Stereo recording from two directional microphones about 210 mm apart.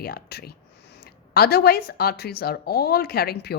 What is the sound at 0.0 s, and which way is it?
Speech, 50° left (ahead or behind).